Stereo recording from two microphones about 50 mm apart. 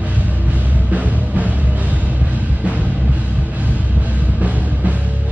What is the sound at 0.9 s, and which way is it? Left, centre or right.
Music, right.